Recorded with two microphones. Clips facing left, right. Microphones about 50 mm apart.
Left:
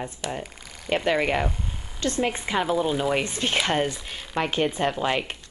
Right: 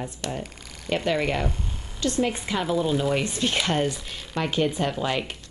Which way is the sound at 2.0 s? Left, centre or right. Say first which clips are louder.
Right 1 dB; left.